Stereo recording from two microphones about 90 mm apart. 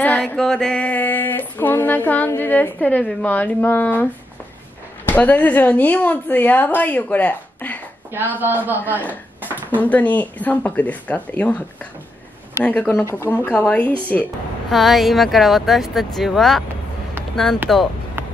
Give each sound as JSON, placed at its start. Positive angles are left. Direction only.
{"t": 0.0, "sound": "a sound", "side_deg": 10}
{"t": 0.4, "sound": "a woman's voice", "side_deg": 5}
{"t": 8.4, "sound": "a man's voice", "side_deg": -20}
{"t": 9.0, "sound": "a sound", "side_deg": 20}
{"t": 9.7, "sound": "speech", "side_deg": 15}
{"t": 12.6, "sound": "a woman's voice", "side_deg": 15}
{"t": 14.7, "sound": "speech", "side_deg": 0}
{"t": 17.7, "sound": "speech", "side_deg": 5}